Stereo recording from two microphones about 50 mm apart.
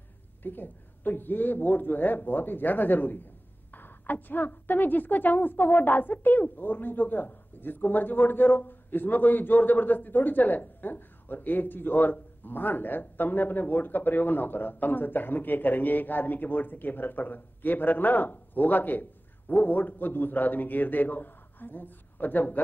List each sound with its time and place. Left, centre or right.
0.4 s a woman's voice: left